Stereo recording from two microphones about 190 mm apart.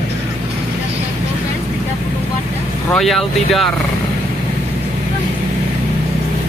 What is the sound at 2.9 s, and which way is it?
Speech, centre (ahead or behind).